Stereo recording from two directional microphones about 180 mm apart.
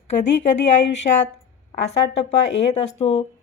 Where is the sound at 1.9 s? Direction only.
35° left (ahead or behind).